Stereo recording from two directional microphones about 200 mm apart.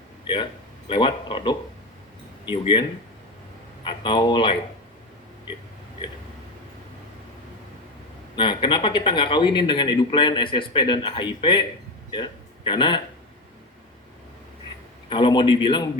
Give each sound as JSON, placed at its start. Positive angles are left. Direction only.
{"t": 0.9, "sound": "speech", "side_deg": 25}
{"t": 3.8, "sound": "speech", "side_deg": 25}
{"t": 8.4, "sound": "a man's voice", "side_deg": 25}
{"t": 15.1, "sound": "speech", "side_deg": 25}